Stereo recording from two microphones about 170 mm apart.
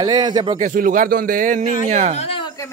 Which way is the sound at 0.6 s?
50° right (ahead or behind).